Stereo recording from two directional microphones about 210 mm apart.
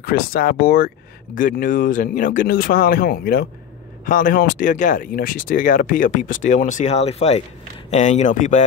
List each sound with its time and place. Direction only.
0.0 s speech: 45° left (ahead or behind)